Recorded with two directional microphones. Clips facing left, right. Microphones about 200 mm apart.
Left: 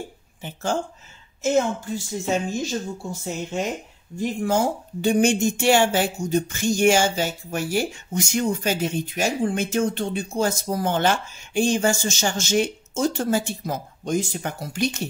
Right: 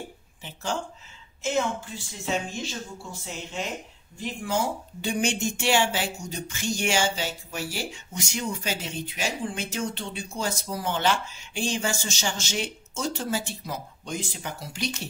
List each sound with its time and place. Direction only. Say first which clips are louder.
0.4 s speech: left 5 dB; 50° left (ahead or behind)
2.2 s speech: left 4 dB; 45° left (ahead or behind)